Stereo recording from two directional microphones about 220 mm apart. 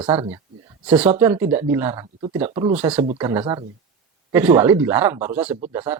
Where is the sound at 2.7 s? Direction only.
5° right (ahead or behind).